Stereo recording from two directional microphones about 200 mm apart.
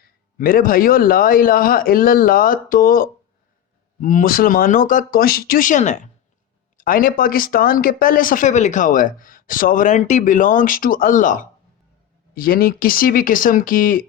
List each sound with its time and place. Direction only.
0.3 s speech: 45° left (ahead or behind)